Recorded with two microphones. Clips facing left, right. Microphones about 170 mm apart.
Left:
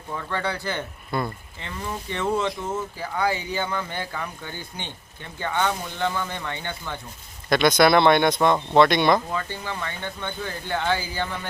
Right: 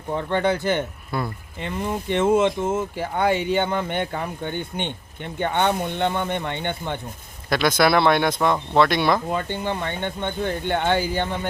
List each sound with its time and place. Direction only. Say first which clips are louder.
0.1 s speech: right 7 dB; 25° right (ahead or behind)
1.1 s speech: even; 5° right (ahead or behind)
1.8 s speech: right 6 dB; 20° right (ahead or behind)
3.3 s speech: right 7 dB; 65° right (ahead or behind)
4.1 s speech: right 5 dB; 25° right (ahead or behind)
4.5 s speech: right 8 dB; 65° right (ahead or behind)
6.0 s speech: right 4 dB; 25° right (ahead or behind)
7.5 s speech: left 1 dB; 5° right (ahead or behind)
9.5 s speech: right 6 dB; 25° right (ahead or behind)
10.6 s speech: right 3 dB; 60° right (ahead or behind)